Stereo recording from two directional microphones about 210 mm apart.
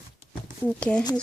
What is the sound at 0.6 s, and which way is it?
Speech, 5° left (ahead or behind).